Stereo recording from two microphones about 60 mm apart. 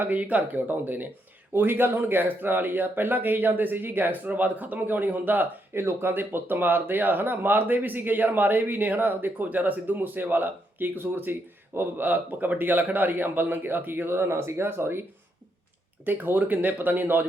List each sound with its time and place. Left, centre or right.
0.0 s speech: right
16.0 s speech: right